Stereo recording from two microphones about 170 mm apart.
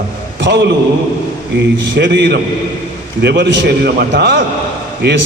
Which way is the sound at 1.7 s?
90° right.